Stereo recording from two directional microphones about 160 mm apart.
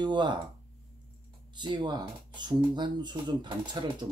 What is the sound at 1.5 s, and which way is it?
Speech, 30° right (ahead or behind).